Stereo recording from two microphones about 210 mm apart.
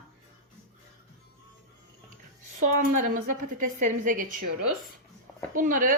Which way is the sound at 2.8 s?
40° right (ahead or behind).